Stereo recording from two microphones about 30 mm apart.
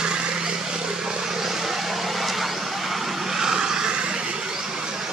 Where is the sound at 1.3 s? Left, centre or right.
Centre; by 4.2 s right.